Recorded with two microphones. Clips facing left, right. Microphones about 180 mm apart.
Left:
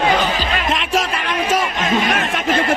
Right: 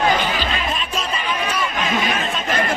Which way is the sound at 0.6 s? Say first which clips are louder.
Left 5 dB; 85° left.